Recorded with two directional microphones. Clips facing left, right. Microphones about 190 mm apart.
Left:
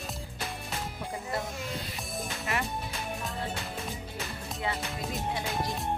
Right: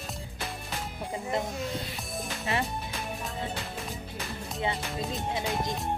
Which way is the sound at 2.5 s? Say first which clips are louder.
Right 3 dB; 30° right (ahead or behind).